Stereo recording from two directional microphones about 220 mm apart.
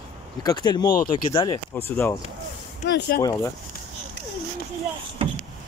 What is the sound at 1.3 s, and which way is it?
Speech, 20° left (ahead or behind).